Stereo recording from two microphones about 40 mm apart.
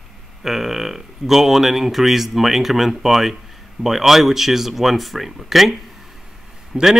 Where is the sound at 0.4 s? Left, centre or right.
Centre.